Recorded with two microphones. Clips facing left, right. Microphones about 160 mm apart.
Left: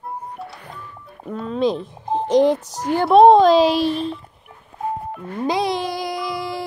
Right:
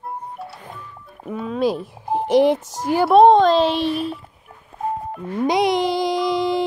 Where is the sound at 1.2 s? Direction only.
5° right (ahead or behind).